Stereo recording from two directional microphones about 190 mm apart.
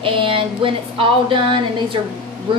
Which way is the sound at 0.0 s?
25° right (ahead or behind).